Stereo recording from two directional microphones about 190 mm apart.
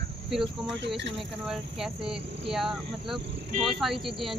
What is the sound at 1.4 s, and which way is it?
Speech, 5° right (ahead or behind).